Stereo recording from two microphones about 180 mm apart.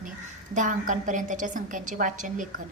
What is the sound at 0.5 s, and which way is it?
A woman's voice, 45° right (ahead or behind).